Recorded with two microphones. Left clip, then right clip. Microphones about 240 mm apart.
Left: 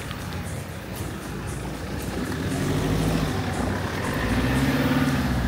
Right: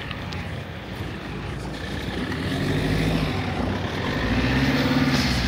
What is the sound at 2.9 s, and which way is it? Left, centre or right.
Vehicle, right.